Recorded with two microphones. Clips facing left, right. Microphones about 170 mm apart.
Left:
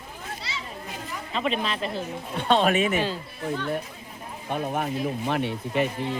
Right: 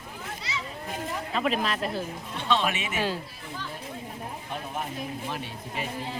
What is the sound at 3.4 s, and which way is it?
Speech, 60° left (ahead or behind).